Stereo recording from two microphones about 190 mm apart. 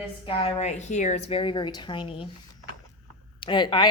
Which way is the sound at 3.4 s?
25° left (ahead or behind).